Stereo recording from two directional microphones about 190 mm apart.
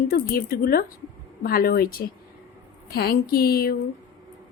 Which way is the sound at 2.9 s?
55° left (ahead or behind).